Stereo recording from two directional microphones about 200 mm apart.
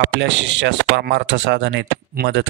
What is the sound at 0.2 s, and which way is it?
A man's voice, 65° right (ahead or behind).